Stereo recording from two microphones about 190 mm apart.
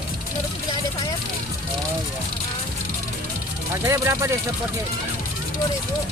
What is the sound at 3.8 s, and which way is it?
Speech, 15° right (ahead or behind).